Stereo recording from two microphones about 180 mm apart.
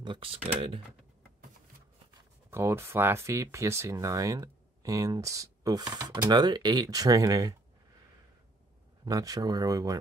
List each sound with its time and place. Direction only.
0.0 s speech: 30° right (ahead or behind)
2.5 s speech: 15° right (ahead or behind)
9.0 s speech: 20° right (ahead or behind)